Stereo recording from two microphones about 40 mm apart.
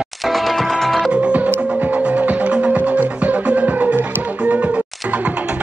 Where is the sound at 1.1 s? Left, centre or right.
Right.